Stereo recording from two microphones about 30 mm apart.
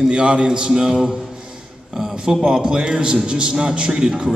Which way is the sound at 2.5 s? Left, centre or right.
Right.